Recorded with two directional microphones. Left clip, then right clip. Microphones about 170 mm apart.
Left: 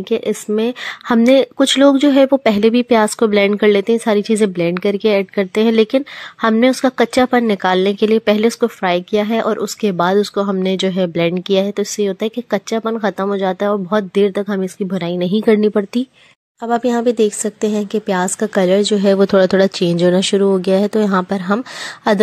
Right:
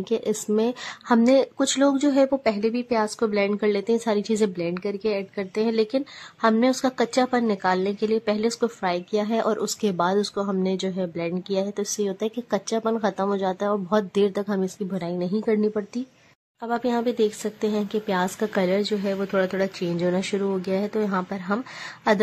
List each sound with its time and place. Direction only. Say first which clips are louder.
0.1 s speech: left 7 dB; 20° left (ahead or behind)